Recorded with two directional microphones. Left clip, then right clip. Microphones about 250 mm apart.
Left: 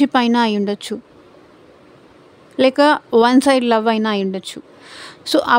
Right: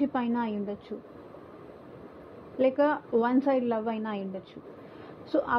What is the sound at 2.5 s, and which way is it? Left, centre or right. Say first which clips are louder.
Speech: left 12 dB; left.